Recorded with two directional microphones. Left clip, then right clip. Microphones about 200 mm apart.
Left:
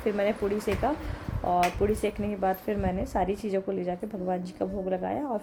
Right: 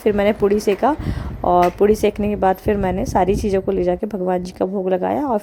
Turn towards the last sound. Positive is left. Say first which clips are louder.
# right 11 dB
turn(degrees=-40)  # may be behind; listen again after turning